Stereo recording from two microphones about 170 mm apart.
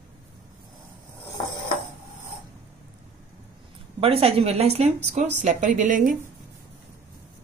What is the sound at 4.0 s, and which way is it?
A woman's voice, 35° right (ahead or behind).